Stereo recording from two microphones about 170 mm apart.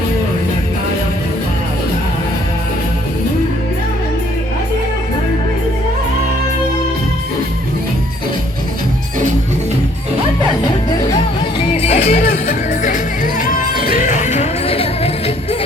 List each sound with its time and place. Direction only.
11.8 s music: 35° left (ahead or behind)
12.1 s music: 60° left (ahead or behind); by 15.1 s 35° left (ahead or behind)